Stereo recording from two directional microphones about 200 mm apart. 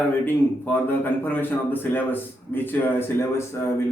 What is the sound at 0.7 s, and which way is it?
A man's voice, 10° left (ahead or behind).